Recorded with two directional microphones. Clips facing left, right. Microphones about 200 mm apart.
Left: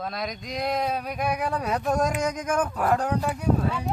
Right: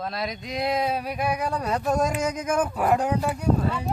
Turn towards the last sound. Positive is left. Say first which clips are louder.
# right 1 dB
turn(degrees=0)  # may be behind; listen again after turning